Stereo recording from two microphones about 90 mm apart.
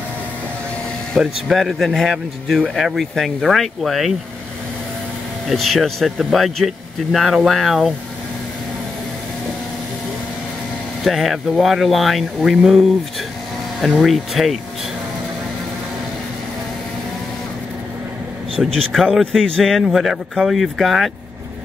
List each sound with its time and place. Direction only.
1.1 s a man's voice: 5° right (ahead or behind)
5.5 s a man's voice: centre (ahead or behind)
11.1 s a man's voice: centre (ahead or behind)
18.6 s a man's voice: 5° left (ahead or behind)